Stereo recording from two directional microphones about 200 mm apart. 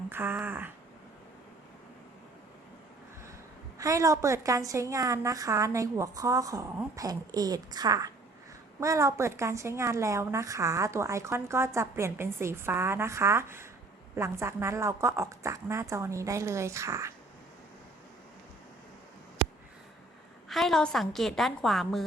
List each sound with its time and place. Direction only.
0.1 s a woman's voice: 10° right (ahead or behind)
3.8 s a woman's voice: 15° right (ahead or behind)
20.5 s a woman's voice: centre (ahead or behind)